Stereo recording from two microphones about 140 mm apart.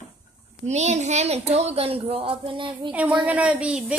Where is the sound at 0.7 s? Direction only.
55° right (ahead or behind); by 2.9 s 35° right (ahead or behind).